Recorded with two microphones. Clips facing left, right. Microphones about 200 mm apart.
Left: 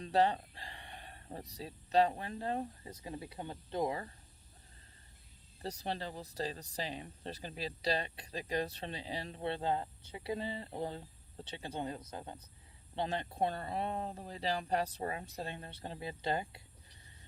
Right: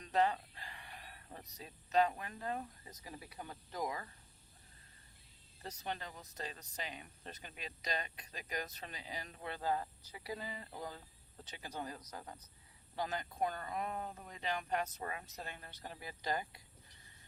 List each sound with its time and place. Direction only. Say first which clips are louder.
0.0 s speech: left 3 dB; 35° left (ahead or behind)
5.6 s speech: left 5 dB; 35° left (ahead or behind)